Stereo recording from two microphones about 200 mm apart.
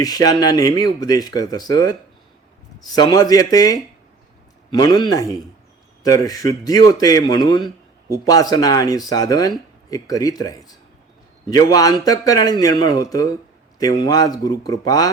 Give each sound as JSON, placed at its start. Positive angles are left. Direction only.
{"t": 0.0, "sound": "speech", "side_deg": 20}